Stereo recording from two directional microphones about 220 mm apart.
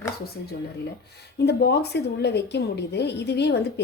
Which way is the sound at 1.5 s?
50° left (ahead or behind).